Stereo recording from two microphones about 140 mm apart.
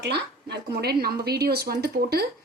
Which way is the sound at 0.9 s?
90° right.